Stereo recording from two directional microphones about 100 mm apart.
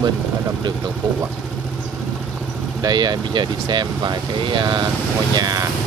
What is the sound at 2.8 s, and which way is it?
Speech, 45° right (ahead or behind).